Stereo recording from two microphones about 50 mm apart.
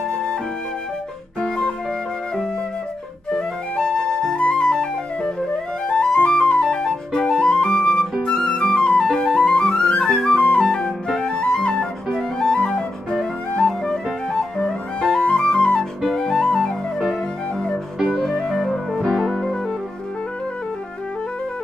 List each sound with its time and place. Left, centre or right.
3.7 s flute: centre
4.4 s flute: left
9.0 s music: centre
10.3 s flute: left
11.1 s music: centre
12.1 s music: centre
15.3 s flute: centre
17.9 s music: centre
18.2 s music: centre